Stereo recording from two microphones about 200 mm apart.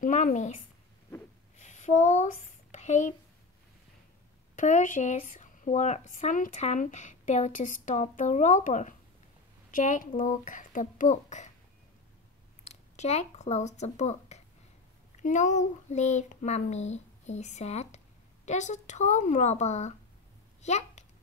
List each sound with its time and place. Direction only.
0.0 s a woman's voice: 40° left (ahead or behind)
1.6 s a sound: 35° left (ahead or behind)
4.6 s a child's voice: 40° left (ahead or behind)
12.6 s a child's voice: 35° left (ahead or behind)